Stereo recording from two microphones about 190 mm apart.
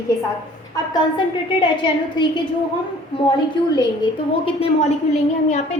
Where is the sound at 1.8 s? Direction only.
25° left (ahead or behind).